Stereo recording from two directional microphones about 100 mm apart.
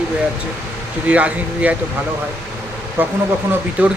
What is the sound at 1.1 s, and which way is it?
Speech, 15° right (ahead or behind).